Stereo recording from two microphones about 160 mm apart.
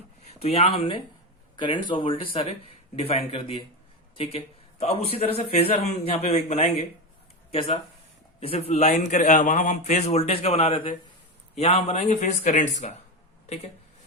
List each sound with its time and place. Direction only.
0.3 s a man's voice: 40° left (ahead or behind)
8.4 s speech: 40° left (ahead or behind)